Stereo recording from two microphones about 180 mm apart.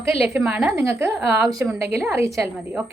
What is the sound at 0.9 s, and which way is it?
A woman's voice, 15° right (ahead or behind).